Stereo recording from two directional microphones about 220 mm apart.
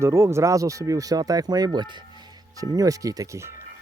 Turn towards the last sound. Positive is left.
turn(degrees=-10)  # may be behind; listen again after turning